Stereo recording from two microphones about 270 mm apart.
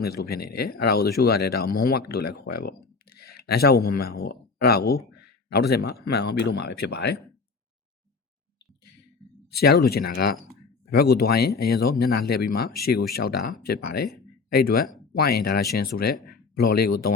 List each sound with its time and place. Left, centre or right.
0.0 s speech: left
9.5 s speech: left